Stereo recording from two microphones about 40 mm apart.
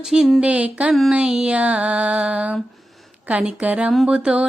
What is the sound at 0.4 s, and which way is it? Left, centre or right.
Music, right.